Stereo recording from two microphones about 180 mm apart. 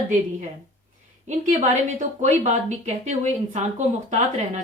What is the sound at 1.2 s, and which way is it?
A woman's voice, 45° right (ahead or behind).